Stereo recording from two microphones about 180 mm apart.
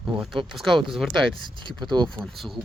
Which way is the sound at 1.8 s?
25° right (ahead or behind).